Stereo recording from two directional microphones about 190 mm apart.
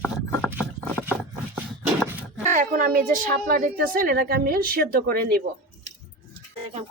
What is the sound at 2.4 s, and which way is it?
Speech, 45° right (ahead or behind).